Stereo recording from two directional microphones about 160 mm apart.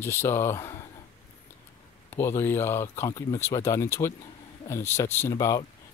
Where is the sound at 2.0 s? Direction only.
15° left (ahead or behind).